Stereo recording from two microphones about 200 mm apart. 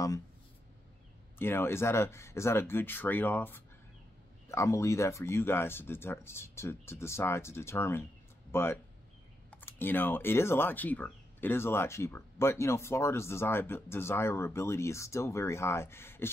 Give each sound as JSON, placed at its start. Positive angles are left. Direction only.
{"t": 1.4, "sound": "speech", "side_deg": 10}